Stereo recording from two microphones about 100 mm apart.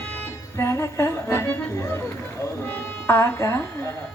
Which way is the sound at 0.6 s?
25° left (ahead or behind).